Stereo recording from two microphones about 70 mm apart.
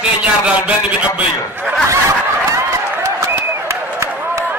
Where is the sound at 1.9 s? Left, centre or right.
Right.